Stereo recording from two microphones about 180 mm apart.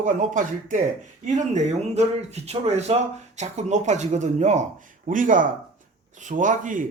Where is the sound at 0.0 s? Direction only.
45° right (ahead or behind).